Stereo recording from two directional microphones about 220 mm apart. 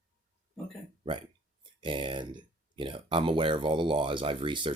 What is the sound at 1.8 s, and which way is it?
Speech, 20° right (ahead or behind).